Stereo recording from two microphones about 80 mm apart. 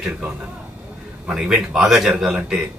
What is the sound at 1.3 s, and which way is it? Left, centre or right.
Speech, centre.